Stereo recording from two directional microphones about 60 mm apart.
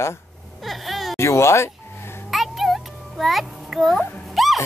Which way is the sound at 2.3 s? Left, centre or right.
Centre.